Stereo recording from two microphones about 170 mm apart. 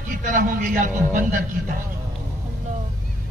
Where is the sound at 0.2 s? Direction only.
50° right (ahead or behind).